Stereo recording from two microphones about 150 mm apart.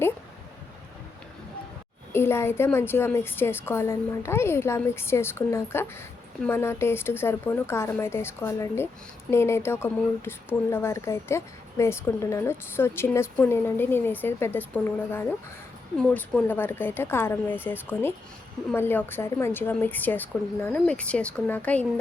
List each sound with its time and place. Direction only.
2.1 s speech: 15° left (ahead or behind)
16.0 s speech: 5° left (ahead or behind)